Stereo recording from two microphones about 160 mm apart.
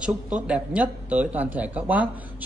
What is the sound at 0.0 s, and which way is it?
A man's voice, 5° right (ahead or behind).